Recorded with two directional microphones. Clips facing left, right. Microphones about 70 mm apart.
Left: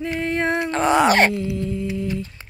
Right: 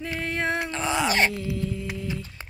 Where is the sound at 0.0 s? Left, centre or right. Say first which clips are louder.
Left 6 dB; centre.